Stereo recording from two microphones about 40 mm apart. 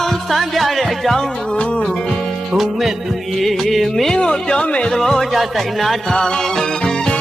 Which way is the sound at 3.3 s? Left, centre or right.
Centre.